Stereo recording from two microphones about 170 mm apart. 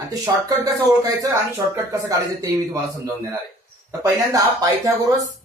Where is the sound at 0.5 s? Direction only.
20° right (ahead or behind).